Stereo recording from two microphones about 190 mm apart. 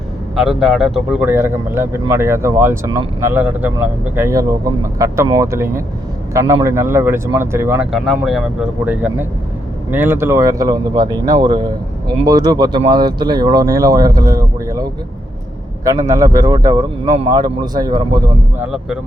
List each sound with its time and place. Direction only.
0.3 s speech: centre (ahead or behind)
7.9 s speech: centre (ahead or behind); by 14.8 s 20° right (ahead or behind)
16.0 s speech: 15° right (ahead or behind)
18.6 s speech: 5° right (ahead or behind)